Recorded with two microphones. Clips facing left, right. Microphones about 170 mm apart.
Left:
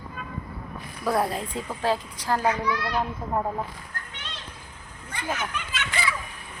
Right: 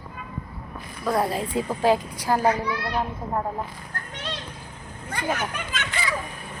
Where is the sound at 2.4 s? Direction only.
35° right (ahead or behind).